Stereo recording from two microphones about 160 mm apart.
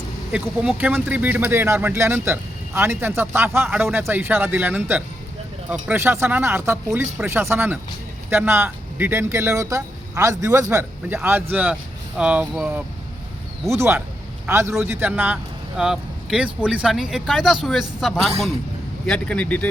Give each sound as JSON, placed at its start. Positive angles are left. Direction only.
{"t": 0.3, "sound": "speech", "side_deg": -5}